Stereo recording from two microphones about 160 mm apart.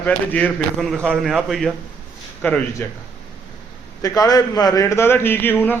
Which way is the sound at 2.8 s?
15° left (ahead or behind).